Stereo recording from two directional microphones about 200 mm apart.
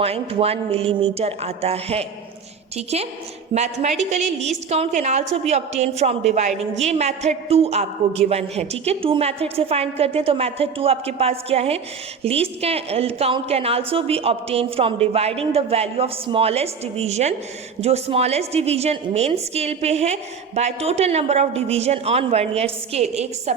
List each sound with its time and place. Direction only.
0.0 s a woman's voice: 30° right (ahead or behind)